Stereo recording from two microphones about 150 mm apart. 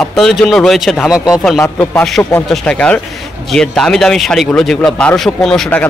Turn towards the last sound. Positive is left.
turn(degrees=5)  # may be behind; listen again after turning